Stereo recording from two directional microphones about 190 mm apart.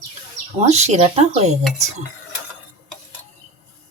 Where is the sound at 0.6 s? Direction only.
35° right (ahead or behind).